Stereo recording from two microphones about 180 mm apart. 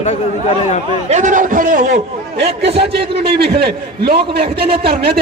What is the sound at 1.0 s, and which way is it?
Speech, 40° right (ahead or behind).